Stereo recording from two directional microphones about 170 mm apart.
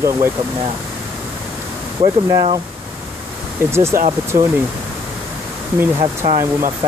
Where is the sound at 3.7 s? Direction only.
15° right (ahead or behind).